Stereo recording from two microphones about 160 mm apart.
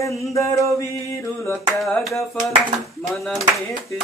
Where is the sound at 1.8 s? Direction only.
Centre (ahead or behind).